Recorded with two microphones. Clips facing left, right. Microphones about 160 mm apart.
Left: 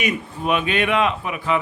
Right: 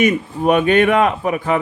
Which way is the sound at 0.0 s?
45° right (ahead or behind).